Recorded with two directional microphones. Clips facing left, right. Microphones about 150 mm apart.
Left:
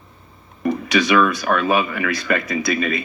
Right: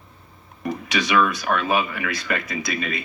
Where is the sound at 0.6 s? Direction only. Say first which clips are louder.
Left 6 dB; 60° left (ahead or behind).